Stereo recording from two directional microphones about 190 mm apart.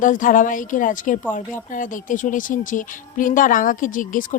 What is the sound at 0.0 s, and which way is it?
Speech, 45° left (ahead or behind).